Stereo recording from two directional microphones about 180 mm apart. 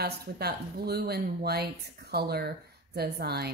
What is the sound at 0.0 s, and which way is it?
Speech, 60° right (ahead or behind).